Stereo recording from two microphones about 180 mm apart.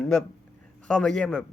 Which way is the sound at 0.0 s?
5° left (ahead or behind).